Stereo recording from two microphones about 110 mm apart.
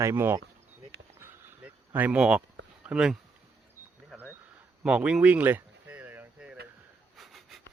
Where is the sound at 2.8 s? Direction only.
5° right (ahead or behind).